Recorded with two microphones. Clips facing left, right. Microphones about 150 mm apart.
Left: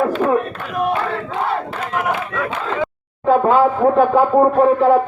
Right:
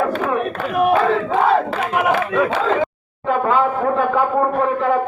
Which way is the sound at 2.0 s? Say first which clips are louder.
Right 3 dB; 90° right.